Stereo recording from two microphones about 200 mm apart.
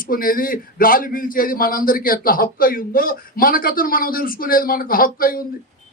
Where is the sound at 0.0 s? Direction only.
45° left (ahead or behind).